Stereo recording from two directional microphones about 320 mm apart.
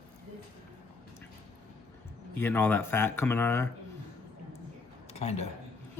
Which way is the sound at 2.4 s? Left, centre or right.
Centre.